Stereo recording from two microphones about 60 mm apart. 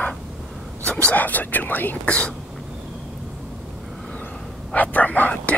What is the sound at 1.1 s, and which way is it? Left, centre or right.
Speech, left.